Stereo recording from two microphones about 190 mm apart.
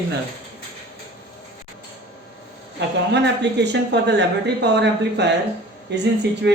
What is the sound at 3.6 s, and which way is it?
Speech, 65° right (ahead or behind).